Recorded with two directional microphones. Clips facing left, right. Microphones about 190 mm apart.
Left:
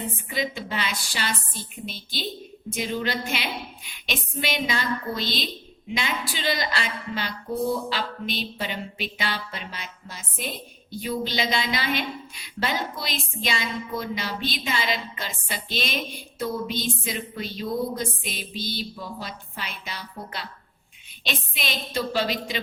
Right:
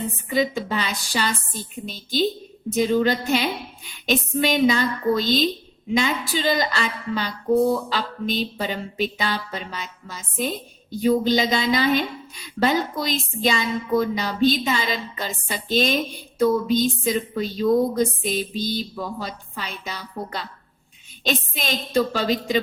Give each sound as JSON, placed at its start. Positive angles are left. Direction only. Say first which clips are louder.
{"t": 0.3, "sound": "a woman's voice", "louder": "right 8 dB", "side_deg": -40}
{"t": 10.9, "sound": "a woman's voice", "louder": "right 9 dB", "side_deg": -45}